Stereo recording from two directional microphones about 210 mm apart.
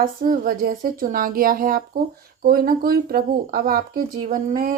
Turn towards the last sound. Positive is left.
turn(degrees=-40)  # may be behind; listen again after turning